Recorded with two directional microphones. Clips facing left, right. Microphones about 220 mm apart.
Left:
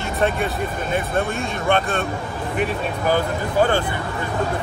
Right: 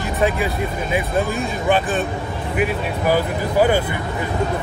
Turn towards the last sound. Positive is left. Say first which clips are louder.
# right 2 dB
turn(degrees=-10)  # may be behind; listen again after turning